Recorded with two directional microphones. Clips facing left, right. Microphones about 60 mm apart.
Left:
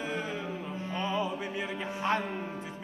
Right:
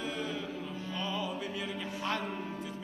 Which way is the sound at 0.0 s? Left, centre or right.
Left.